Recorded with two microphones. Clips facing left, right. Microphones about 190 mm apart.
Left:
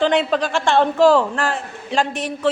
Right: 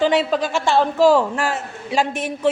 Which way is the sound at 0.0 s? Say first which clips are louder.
Even; 5° right (ahead or behind).